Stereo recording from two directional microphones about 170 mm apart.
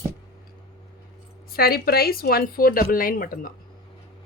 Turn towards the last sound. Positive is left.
turn(degrees=55)  # may be behind; listen again after turning